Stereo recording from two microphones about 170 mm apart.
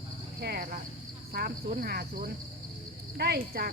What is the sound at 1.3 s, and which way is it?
Speech, 60° right (ahead or behind).